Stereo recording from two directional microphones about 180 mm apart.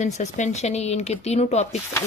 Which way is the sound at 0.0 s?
40° left (ahead or behind).